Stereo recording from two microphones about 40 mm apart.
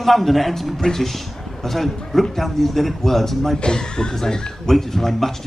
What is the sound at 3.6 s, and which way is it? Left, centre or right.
A man's voice, left.